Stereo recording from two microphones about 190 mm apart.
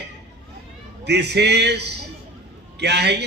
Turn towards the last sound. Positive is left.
turn(degrees=-60)  # may be behind; listen again after turning